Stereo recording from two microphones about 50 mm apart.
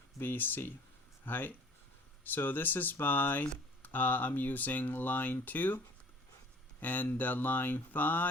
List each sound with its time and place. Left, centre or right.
0.2 s speech: left